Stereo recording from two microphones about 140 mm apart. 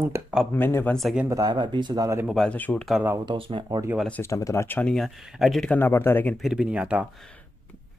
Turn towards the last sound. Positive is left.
turn(degrees=10)  # may be behind; listen again after turning